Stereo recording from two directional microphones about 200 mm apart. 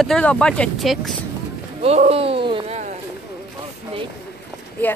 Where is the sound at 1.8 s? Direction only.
30° right (ahead or behind).